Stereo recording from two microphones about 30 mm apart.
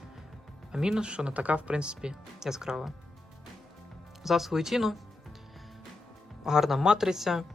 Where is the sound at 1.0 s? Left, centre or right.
Right.